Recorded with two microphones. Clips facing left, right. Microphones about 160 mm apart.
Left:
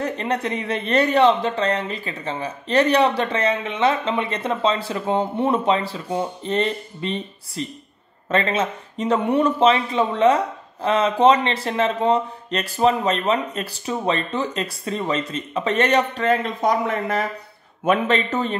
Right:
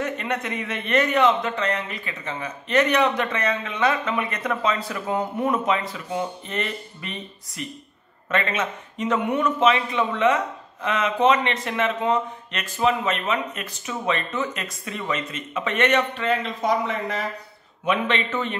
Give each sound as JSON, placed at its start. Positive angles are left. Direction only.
{"t": 0.0, "sound": "speech", "side_deg": 30}